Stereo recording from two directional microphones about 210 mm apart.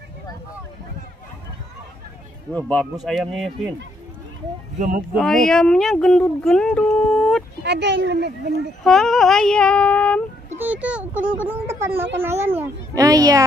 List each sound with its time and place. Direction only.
2.5 s speech: centre (ahead or behind)
4.7 s speech: 40° right (ahead or behind)
5.1 s speech: centre (ahead or behind)
7.6 s a child's voice: 55° right (ahead or behind)
8.8 s speech: centre (ahead or behind)
10.6 s a child's voice: 5° right (ahead or behind)